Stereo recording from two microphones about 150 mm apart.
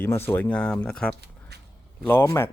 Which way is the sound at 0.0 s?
15° left (ahead or behind).